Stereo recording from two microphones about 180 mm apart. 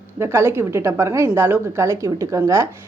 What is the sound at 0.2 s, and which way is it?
A woman's voice, 15° right (ahead or behind).